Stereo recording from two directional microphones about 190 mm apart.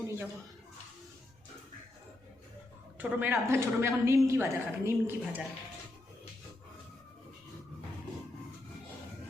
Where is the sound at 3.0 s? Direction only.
10° right (ahead or behind).